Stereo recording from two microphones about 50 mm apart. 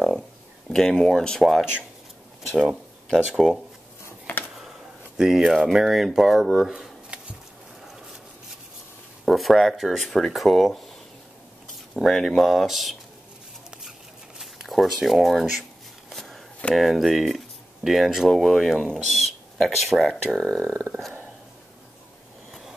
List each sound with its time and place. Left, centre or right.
0.7 s speech: centre
2.5 s speech: centre
4.6 s a sound: centre
5.7 s speech: centre
9.2 s speech: centre
12.0 s speech: centre
14.4 s speech: centre
16.1 s a sound: centre
16.7 s speech: centre